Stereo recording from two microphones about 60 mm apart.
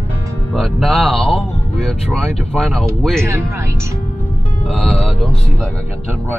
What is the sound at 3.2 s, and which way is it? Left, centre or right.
Speech, right.